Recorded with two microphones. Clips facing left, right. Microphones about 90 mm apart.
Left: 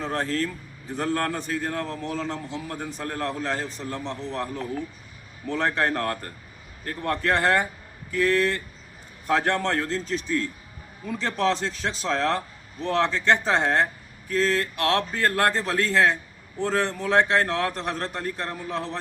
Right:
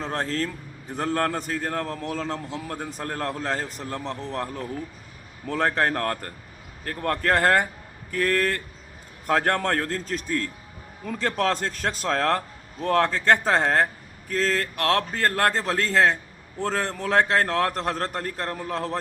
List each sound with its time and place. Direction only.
0.0 s a man's voice: 35° right (ahead or behind)